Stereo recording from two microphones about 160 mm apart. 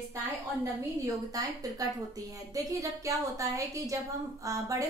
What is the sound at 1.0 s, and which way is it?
A woman's voice, 20° right (ahead or behind).